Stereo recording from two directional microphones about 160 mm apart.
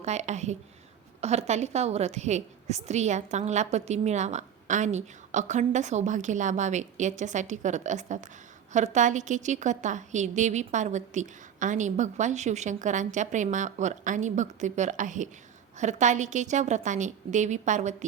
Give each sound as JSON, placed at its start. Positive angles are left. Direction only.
{"t": 0.0, "sound": "a woman's voice", "side_deg": -45}